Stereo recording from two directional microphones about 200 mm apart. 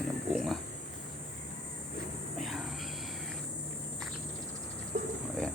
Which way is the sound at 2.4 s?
Centre (ahead or behind).